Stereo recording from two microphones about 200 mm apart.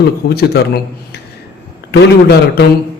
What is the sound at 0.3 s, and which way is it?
Speech, 55° left (ahead or behind).